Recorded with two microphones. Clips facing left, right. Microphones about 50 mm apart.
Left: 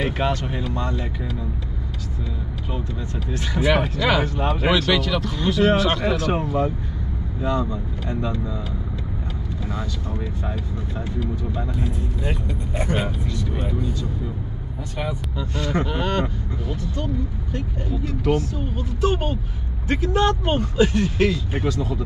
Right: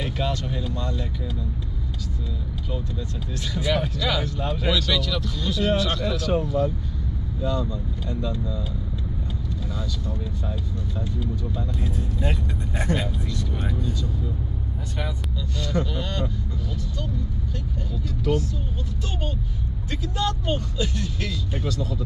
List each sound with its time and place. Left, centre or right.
0.0 s speech: left
3.3 s speech: left
9.7 s speech: left
11.7 s speech: centre
13.3 s speech: centre
15.0 s speech: left
17.9 s speech: left
19.9 s speech: left